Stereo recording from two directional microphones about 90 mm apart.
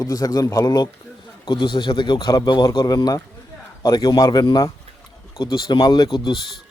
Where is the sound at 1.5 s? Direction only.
60° left (ahead or behind); by 4.4 s 45° left (ahead or behind).